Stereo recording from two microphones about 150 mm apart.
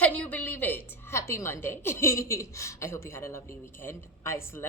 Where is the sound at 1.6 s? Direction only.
15° left (ahead or behind).